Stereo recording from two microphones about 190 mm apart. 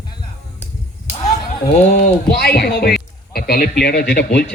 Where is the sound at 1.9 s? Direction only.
55° left (ahead or behind).